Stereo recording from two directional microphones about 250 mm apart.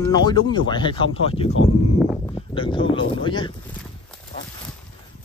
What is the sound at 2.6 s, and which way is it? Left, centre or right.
Speech, centre.